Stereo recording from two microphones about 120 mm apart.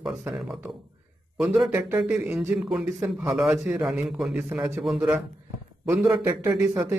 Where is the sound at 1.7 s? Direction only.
15° right (ahead or behind).